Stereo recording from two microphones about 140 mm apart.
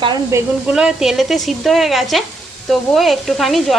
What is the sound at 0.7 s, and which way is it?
Speech, 5° right (ahead or behind).